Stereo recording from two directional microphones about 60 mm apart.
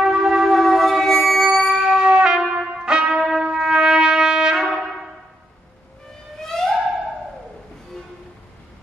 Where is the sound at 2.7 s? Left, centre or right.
Centre.